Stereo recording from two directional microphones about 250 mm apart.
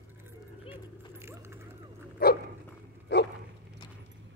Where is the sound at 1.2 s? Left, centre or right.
Centre.